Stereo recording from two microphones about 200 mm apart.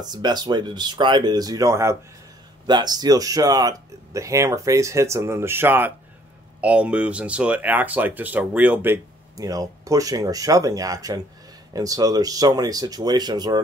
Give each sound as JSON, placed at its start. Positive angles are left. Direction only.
{"t": 0.0, "sound": "speech", "side_deg": -20}